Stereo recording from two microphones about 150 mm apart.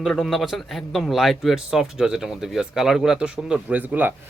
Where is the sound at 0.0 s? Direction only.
Centre (ahead or behind).